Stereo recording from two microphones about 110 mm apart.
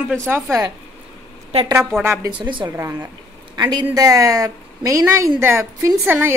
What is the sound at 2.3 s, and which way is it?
Speech, 45° right (ahead or behind).